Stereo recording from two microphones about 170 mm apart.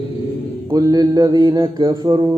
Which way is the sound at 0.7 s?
20° right (ahead or behind).